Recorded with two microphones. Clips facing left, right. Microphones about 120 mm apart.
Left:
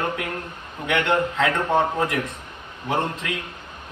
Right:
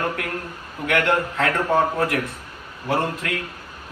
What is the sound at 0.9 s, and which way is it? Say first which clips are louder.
Speech: even; 20° left (ahead or behind).